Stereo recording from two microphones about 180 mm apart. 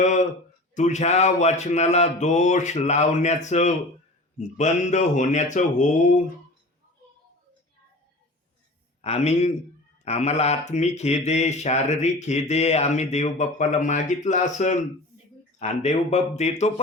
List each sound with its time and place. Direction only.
0.0 s a sound: 40° left (ahead or behind)
0.7 s speech: 40° left (ahead or behind)
9.0 s a man's voice: 35° left (ahead or behind)